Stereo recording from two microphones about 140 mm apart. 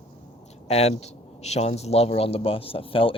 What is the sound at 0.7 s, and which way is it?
Speech, 50° left (ahead or behind).